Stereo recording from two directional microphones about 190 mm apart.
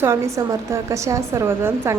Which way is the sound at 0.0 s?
15° right (ahead or behind).